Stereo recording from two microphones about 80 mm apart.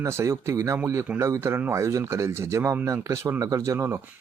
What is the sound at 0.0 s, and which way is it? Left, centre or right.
Speech, right.